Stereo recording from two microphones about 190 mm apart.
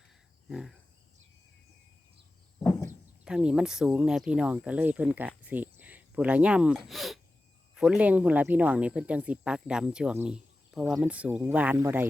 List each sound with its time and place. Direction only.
0.4 s cricket: centre (ahead or behind)
2.6 s a sound: 15° left (ahead or behind)
3.2 s speech: 5° right (ahead or behind)